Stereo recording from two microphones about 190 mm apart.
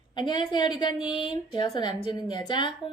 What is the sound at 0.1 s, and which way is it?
Speech, 25° left (ahead or behind).